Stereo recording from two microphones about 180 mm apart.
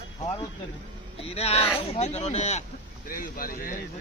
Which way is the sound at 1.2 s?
35° left (ahead or behind).